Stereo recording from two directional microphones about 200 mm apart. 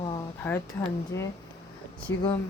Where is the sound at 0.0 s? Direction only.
25° left (ahead or behind).